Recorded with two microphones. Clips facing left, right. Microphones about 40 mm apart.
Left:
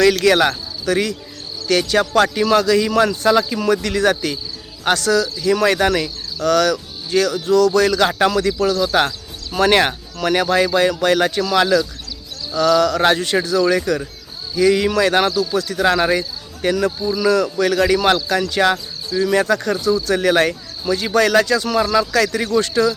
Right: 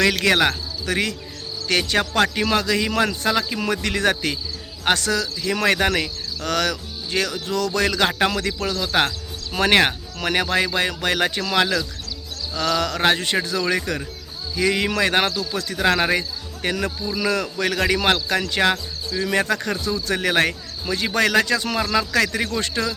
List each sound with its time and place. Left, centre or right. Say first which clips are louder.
0.0 s speech: left 4 dB; centre
0.9 s speech: left 5 dB; right
15.9 s speech: left 3 dB; centre
16.1 s speech: left 2 dB; right
21.8 s speech: left 7 dB; centre
22.1 s speech: left 4 dB; right